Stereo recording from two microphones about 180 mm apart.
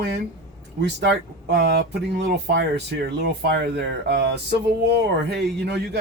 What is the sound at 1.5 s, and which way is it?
Speech, 70° right (ahead or behind).